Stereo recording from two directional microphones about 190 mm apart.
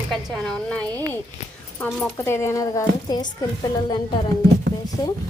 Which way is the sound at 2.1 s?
15° left (ahead or behind).